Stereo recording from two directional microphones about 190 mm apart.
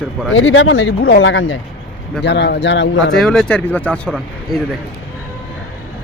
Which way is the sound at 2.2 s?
65° left (ahead or behind).